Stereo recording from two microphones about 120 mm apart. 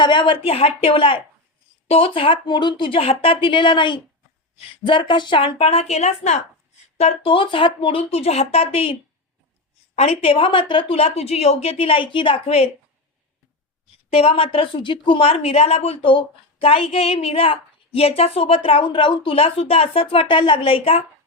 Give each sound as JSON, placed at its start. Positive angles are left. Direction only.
{"t": 0.0, "sound": "a woman's voice", "side_deg": 40}
{"t": 6.9, "sound": "a woman's voice", "side_deg": 55}
{"t": 14.1, "sound": "a woman's voice", "side_deg": 55}